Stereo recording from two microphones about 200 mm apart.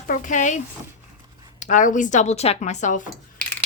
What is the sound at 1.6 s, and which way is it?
Speech, 40° left (ahead or behind).